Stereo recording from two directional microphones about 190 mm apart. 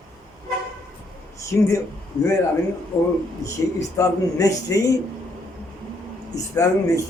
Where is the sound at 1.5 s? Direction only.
10° left (ahead or behind).